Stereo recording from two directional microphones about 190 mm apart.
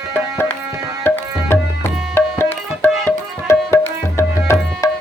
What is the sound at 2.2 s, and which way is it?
Music, 10° left (ahead or behind).